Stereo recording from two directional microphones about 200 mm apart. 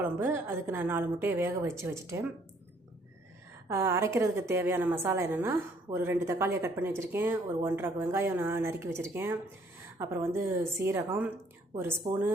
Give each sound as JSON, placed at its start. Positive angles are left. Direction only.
{"t": 0.0, "sound": "a woman's voice", "side_deg": -10}
{"t": 3.7, "sound": "a woman's voice", "side_deg": -10}
{"t": 12.1, "sound": "speech", "side_deg": -35}